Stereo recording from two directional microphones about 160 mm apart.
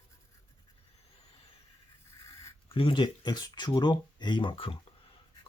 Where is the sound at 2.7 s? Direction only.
35° left (ahead or behind).